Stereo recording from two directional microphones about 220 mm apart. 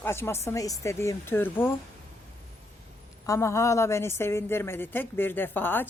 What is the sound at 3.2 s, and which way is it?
A woman's voice, 15° left (ahead or behind).